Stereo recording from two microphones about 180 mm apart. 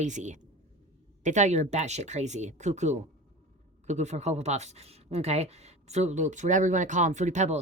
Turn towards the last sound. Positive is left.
turn(degrees=-40)  # may be behind; listen again after turning